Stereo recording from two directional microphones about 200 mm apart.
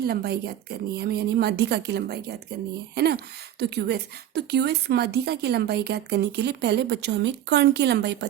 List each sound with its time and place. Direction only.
0.0 s a woman's voice: 50° right (ahead or behind)